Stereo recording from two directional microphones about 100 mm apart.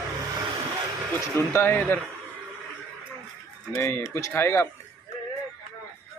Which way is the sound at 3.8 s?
25° left (ahead or behind).